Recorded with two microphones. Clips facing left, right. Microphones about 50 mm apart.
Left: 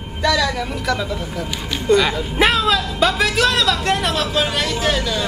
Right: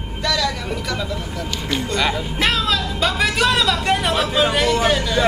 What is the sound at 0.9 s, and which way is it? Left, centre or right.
Speech, centre.